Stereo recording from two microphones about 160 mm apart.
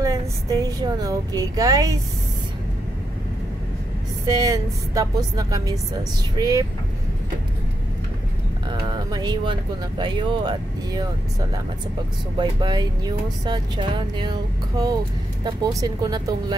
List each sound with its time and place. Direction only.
0.0 s speech: 20° right (ahead or behind)
4.4 s speech: 20° right (ahead or behind)
8.6 s speech: 25° right (ahead or behind)
12.4 s speech: 25° right (ahead or behind)